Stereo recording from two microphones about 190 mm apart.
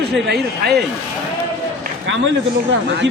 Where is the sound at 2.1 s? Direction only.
75° right (ahead or behind).